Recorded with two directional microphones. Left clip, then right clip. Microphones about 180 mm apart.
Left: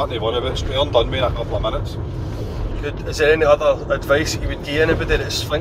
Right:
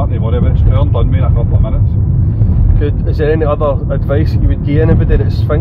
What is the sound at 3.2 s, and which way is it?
Speech, 20° right (ahead or behind).